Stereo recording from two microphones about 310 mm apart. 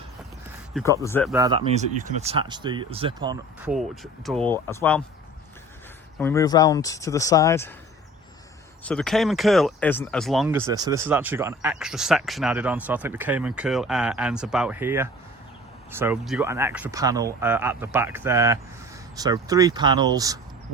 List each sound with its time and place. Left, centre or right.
0.7 s speech: centre
1.4 s speech: centre
3.7 s speech: centre
6.1 s speech: centre
8.8 s speech: centre